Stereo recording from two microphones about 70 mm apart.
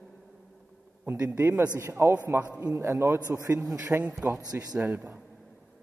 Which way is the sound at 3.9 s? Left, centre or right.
Centre.